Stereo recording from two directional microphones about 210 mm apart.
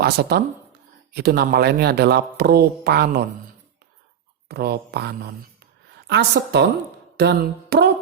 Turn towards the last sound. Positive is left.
turn(degrees=-50)  # may be behind; listen again after turning